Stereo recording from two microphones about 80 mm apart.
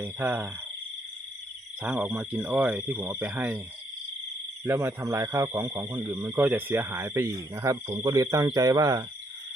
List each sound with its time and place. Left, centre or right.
0.0 s speech: right
2.0 s speech: centre
4.6 s speech: right